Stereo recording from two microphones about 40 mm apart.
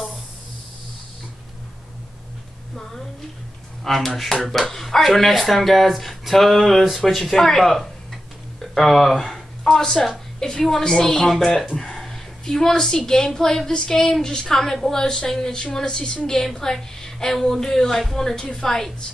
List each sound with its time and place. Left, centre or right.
2.7 s a woman's voice: centre
7.3 s a sound: centre
10.4 s a woman's voice: centre
14.6 s a woman's voice: centre